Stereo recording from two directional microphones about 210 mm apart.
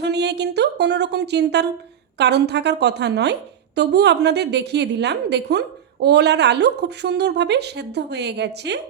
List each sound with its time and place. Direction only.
0.0 s a woman's voice: 55° right (ahead or behind)